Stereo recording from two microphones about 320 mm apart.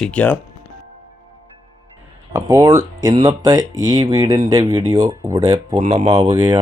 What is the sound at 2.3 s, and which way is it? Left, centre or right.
Speech, centre.